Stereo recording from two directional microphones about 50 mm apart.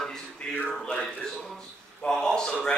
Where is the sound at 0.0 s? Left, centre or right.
Centre.